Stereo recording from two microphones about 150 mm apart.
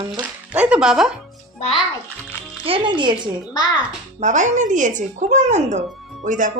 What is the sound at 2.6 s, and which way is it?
Speech, 35° right (ahead or behind).